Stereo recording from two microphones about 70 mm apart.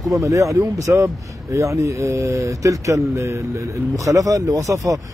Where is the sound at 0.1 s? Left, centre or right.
Right.